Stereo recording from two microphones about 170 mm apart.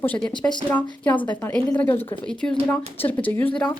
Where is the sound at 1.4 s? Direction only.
5° left (ahead or behind).